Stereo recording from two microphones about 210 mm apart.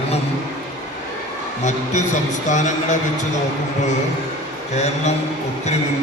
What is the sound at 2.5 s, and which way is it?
Speech, 35° left (ahead or behind).